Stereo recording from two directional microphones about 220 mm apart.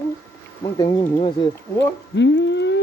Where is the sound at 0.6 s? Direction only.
20° left (ahead or behind).